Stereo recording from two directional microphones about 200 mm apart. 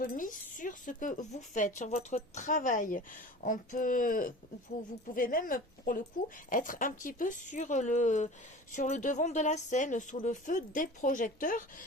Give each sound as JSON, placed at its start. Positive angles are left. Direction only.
{"t": 0.0, "sound": "speech", "side_deg": 40}